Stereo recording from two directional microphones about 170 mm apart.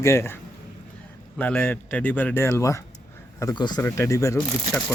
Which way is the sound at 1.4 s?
10° left (ahead or behind).